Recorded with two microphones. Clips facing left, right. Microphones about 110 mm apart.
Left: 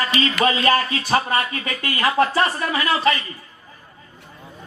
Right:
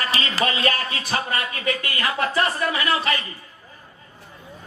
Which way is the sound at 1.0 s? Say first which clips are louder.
Left 5 dB; 35° left (ahead or behind).